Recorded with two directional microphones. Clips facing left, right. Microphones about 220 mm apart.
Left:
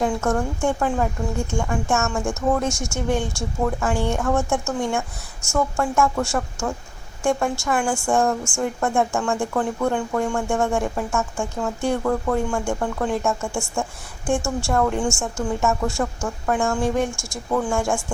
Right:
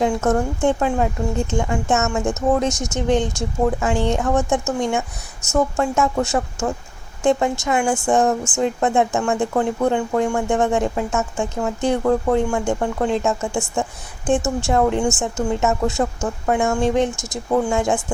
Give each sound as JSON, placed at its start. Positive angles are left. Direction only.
{"t": 0.0, "sound": "speech", "side_deg": -20}